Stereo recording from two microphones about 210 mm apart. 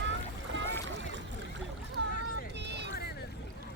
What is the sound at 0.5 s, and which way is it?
Rowboat, 60° right (ahead or behind).